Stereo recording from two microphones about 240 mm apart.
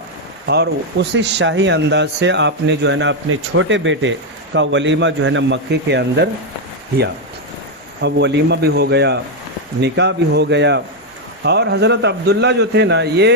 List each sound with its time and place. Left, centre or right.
0.4 s a man's voice: right
8.0 s a man's voice: right